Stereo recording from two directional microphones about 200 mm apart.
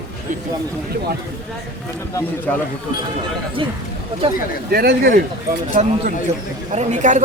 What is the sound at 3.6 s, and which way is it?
Speech, 25° right (ahead or behind).